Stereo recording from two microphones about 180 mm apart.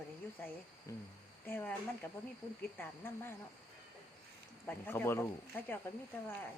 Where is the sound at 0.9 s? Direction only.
15° left (ahead or behind).